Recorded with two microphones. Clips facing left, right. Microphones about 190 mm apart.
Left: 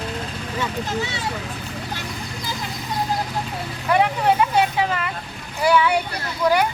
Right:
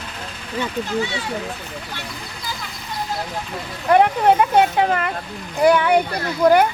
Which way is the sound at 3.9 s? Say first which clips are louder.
Right 4 dB; 55° right (ahead or behind).